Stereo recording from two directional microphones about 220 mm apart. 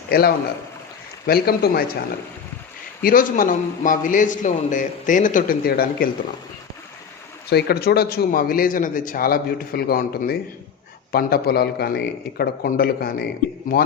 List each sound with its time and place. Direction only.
0.1 s a man's voice: 45° left (ahead or behind)
3.0 s a man's voice: 40° left (ahead or behind)
7.5 s a man's voice: 45° left (ahead or behind)